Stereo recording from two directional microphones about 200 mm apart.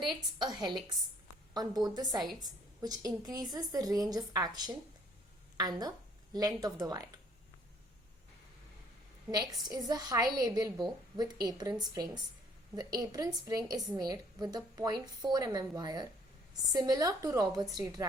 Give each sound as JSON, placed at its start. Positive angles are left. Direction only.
{"t": 0.0, "sound": "a woman's voice", "side_deg": -25}
{"t": 9.3, "sound": "a woman's voice", "side_deg": -20}